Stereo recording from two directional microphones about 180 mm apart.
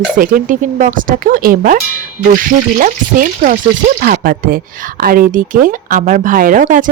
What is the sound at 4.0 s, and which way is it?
Speech, 50° right (ahead or behind).